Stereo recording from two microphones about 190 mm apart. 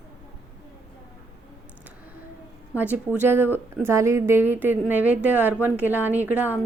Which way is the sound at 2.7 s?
10° right (ahead or behind).